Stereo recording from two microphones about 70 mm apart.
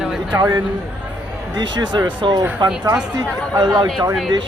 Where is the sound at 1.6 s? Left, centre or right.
Right.